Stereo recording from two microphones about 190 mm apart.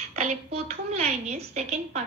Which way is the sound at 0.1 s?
35° right (ahead or behind).